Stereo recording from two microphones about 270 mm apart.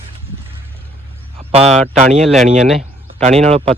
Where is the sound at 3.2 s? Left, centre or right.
Right.